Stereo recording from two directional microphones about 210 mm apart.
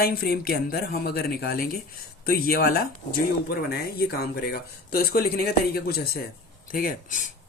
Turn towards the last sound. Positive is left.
turn(degrees=40)  # may be behind; listen again after turning